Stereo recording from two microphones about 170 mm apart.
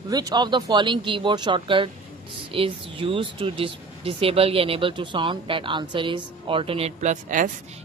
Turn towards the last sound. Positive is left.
turn(degrees=-50)  # may be behind; listen again after turning